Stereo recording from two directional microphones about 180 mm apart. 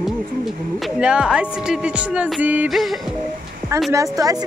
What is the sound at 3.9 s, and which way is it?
Speech, 20° right (ahead or behind).